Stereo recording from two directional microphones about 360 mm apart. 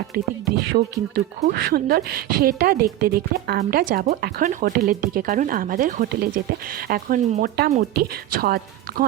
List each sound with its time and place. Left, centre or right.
0.1 s speech: right
0.7 s speech: right